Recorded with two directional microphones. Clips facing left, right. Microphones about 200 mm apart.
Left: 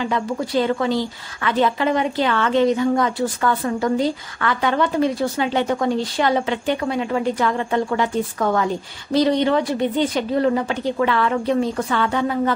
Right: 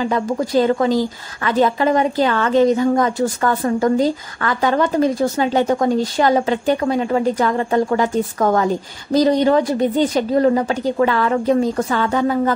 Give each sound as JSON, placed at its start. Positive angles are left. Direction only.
{"t": 0.1, "sound": "a woman's voice", "side_deg": -40}